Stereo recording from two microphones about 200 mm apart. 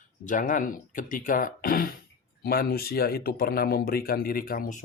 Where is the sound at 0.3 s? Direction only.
40° left (ahead or behind).